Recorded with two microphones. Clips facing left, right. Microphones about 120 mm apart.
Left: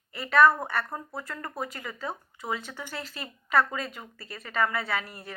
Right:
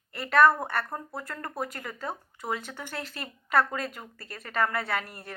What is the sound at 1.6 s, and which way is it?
Speech, 50° right (ahead or behind).